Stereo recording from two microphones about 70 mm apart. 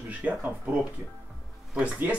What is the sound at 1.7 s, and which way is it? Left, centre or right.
Speech, right.